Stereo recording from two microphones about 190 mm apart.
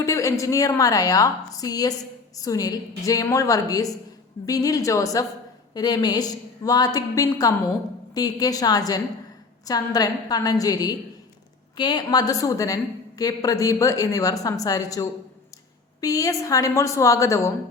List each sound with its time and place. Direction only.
0.0 s a woman's voice: 15° left (ahead or behind)